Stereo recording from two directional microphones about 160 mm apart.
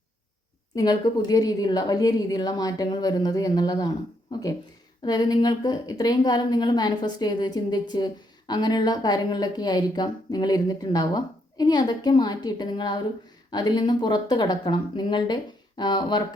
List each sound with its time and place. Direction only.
0.8 s a woman's voice: 25° left (ahead or behind)